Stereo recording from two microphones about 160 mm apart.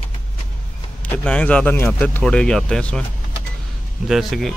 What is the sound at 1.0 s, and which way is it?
Speech, 10° left (ahead or behind).